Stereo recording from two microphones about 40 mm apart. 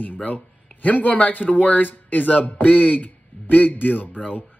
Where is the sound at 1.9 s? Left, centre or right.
Left.